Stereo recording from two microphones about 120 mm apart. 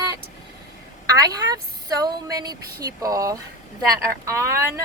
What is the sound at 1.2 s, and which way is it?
Speech, 30° right (ahead or behind).